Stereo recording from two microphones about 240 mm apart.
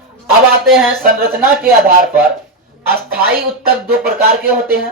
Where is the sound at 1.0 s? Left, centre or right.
Right.